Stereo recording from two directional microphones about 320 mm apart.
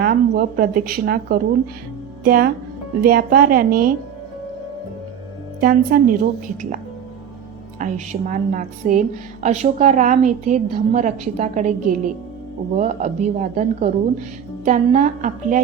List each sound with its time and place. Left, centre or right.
0.0 s a woman's voice: right
5.5 s a woman's voice: right
7.8 s a woman's voice: right